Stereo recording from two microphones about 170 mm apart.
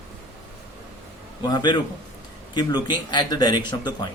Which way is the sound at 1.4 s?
25° left (ahead or behind).